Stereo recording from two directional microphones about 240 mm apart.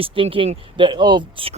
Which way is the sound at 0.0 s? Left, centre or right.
Right.